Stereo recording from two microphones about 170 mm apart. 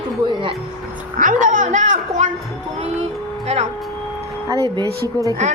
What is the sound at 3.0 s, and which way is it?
Music, 40° right (ahead or behind).